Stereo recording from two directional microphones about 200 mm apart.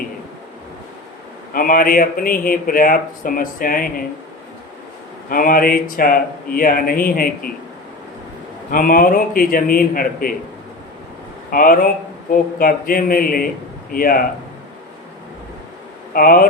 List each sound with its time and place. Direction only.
1.5 s speech: 45° left (ahead or behind)
5.3 s speech: 45° left (ahead or behind)
8.7 s speech: 45° left (ahead or behind)
11.5 s speech: 45° left (ahead or behind)
16.1 s speech: 45° left (ahead or behind)